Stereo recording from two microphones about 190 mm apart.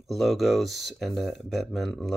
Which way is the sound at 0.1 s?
Centre (ahead or behind).